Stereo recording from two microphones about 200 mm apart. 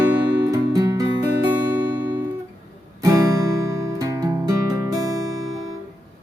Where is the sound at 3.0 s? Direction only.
15° right (ahead or behind).